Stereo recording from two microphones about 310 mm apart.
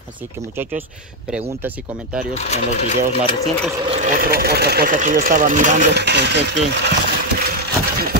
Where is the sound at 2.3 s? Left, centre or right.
Left.